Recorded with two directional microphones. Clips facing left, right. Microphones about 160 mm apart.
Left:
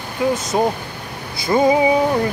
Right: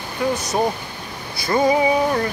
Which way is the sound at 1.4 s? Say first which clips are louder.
Left 2 dB; 25° left (ahead or behind).